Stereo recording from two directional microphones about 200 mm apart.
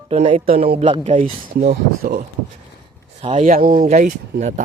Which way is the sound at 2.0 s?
50° right (ahead or behind).